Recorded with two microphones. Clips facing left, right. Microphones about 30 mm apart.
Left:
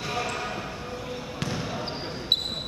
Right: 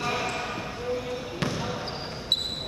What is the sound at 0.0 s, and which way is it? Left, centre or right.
Basketball bounce, centre.